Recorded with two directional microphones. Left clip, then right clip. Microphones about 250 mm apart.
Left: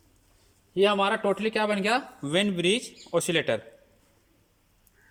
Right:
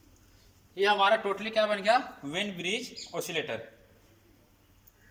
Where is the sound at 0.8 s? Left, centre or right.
Left.